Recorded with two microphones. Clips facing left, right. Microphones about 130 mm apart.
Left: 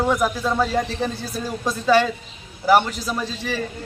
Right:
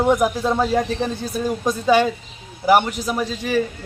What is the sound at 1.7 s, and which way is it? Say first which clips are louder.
A man's voice: right 1 dB; 15° right (ahead or behind).